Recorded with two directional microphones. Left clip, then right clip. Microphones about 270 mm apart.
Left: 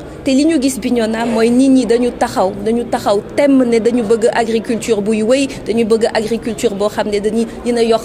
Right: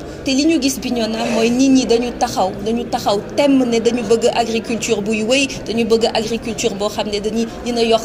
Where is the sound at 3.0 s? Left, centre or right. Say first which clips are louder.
Left 2 dB; left.